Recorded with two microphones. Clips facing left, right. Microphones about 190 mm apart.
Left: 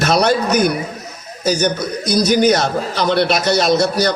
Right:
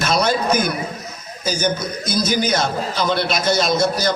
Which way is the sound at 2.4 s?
60° left (ahead or behind).